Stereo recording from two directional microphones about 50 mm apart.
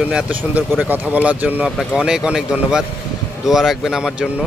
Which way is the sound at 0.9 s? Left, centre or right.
Right.